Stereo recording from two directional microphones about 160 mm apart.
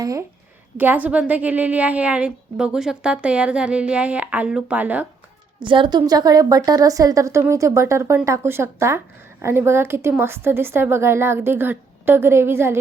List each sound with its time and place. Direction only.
0.0 s a woman's voice: 20° right (ahead or behind)
0.8 s a woman's voice: 10° right (ahead or behind)
5.5 s a woman's voice: 30° right (ahead or behind); by 12.7 s 15° right (ahead or behind)